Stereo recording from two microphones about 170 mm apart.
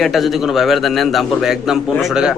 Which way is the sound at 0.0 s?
Centre (ahead or behind).